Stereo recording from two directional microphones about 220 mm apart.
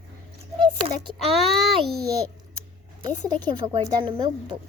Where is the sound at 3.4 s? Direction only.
20° right (ahead or behind).